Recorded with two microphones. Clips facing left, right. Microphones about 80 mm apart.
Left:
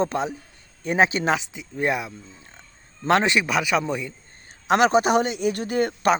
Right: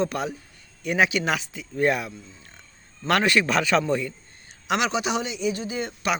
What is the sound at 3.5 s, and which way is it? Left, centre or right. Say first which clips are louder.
Speech: right 1 dB; centre.